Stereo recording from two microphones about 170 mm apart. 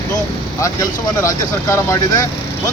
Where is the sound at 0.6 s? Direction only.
20° left (ahead or behind).